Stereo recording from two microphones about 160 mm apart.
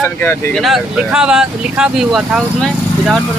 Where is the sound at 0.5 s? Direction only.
Centre (ahead or behind).